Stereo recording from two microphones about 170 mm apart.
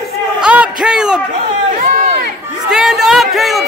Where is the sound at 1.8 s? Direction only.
45° right (ahead or behind).